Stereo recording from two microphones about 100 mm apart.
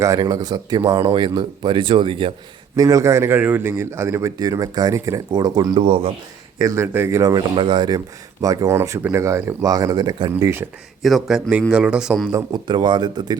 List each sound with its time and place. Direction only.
0.0 s speech: 35° right (ahead or behind); by 2.3 s 60° right (ahead or behind)
2.7 s speech: 35° right (ahead or behind)
4.4 s speech: 40° right (ahead or behind)
5.8 s a man's voice: 70° right (ahead or behind)
6.6 s speech: 30° right (ahead or behind)
7.3 s speech: 55° right (ahead or behind)
11.0 s a man's voice: centre (ahead or behind)
12.5 s speech: 45° right (ahead or behind)